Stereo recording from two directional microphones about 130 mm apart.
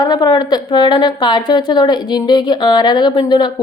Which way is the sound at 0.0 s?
30° left (ahead or behind).